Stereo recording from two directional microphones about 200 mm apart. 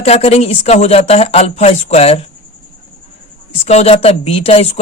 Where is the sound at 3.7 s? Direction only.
30° left (ahead or behind).